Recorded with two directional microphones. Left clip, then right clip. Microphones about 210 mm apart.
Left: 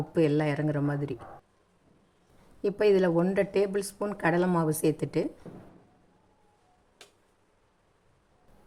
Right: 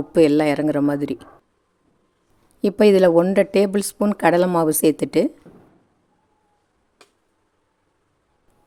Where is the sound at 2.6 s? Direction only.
45° right (ahead or behind).